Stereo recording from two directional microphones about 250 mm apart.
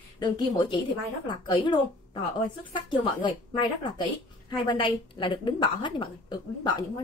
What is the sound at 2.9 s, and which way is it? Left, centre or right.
A woman's voice, centre.